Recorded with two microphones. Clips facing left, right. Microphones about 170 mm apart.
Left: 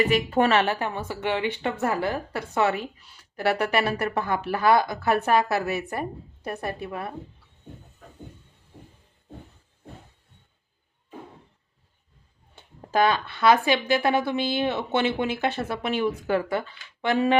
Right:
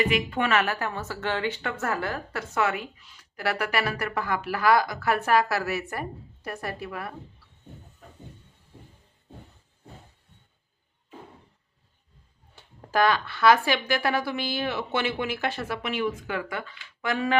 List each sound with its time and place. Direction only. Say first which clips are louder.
0.0 s speech: left 4 dB; 40° left (ahead or behind); by 2.6 s 20° left (ahead or behind)
2.6 s speech: left 3 dB; 30° left (ahead or behind)
12.5 s speech: left 2 dB; 20° left (ahead or behind)